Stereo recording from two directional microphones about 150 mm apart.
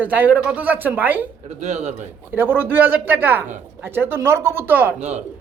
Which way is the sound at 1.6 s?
45° right (ahead or behind).